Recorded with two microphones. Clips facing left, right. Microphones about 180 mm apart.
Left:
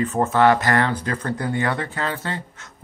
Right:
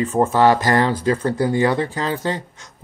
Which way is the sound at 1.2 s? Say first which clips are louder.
Right 5 dB; 30° right (ahead or behind).